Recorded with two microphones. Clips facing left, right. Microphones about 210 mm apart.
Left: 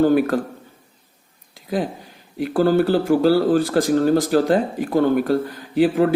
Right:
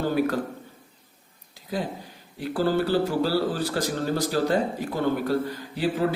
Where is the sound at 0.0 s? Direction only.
50° left (ahead or behind).